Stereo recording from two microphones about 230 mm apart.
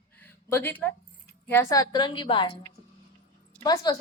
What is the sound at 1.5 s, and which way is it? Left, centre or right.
A woman's voice, centre.